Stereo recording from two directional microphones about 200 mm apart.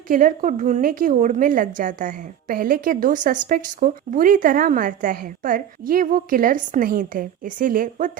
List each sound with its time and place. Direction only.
0.1 s a woman's voice: 45° right (ahead or behind)